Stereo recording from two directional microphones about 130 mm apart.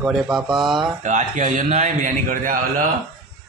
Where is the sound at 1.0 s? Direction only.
70° right (ahead or behind); by 2.9 s 90° right.